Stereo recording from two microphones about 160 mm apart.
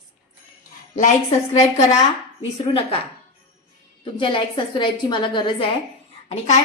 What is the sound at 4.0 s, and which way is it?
A woman's voice, 30° left (ahead or behind).